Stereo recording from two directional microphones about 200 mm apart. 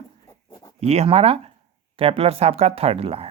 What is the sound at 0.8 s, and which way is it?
Speech, 30° right (ahead or behind).